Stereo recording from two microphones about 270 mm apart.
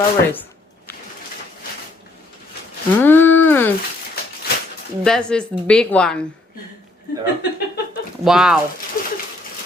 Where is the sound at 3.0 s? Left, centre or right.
Centre.